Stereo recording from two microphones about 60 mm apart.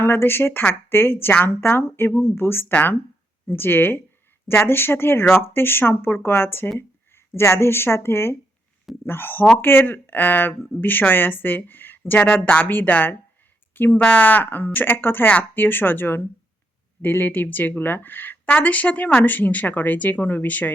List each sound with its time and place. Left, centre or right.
0.0 s speech: left